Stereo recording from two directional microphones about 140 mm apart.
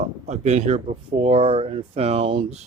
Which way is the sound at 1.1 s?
40° right (ahead or behind).